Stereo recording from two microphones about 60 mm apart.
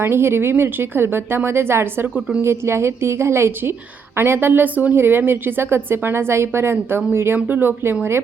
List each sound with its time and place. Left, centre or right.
0.0 s a woman's voice: right
7.3 s a woman's voice: right